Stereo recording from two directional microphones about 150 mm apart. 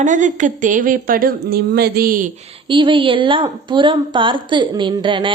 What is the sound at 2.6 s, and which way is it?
A woman's voice, 35° right (ahead or behind).